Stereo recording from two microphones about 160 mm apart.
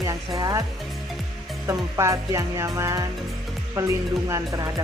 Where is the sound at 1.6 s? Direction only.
20° right (ahead or behind).